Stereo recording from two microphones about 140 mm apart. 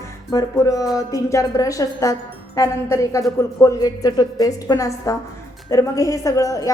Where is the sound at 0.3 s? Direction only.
25° left (ahead or behind).